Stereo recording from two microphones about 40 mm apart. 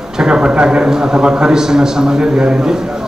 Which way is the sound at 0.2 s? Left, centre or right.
Right.